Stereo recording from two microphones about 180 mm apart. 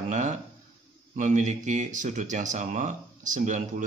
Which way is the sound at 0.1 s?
40° right (ahead or behind).